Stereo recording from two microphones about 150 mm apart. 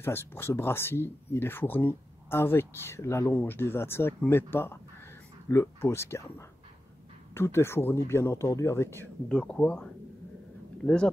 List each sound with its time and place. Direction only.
0.0 s speech: 15° left (ahead or behind)
9.3 s speech: 5° left (ahead or behind)